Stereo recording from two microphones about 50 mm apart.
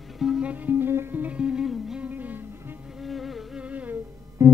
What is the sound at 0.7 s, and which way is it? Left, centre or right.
Music, right.